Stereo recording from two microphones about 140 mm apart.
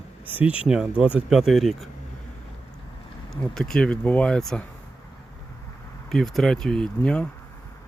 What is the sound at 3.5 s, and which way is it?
Speech, 5° left (ahead or behind).